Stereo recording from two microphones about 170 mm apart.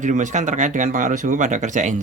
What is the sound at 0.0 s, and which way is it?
Speech, 45° right (ahead or behind).